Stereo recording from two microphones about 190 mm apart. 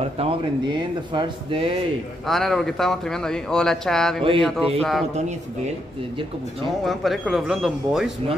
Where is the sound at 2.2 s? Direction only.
Centre (ahead or behind).